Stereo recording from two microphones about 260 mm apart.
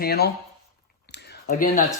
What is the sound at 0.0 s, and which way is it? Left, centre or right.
Speech, left.